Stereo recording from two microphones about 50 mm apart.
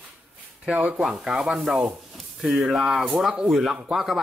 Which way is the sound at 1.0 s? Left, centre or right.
Centre.